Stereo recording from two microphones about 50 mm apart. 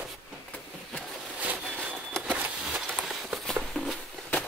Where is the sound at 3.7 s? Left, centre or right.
Centre.